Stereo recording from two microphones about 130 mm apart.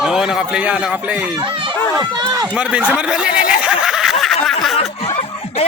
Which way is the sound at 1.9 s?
30° right (ahead or behind).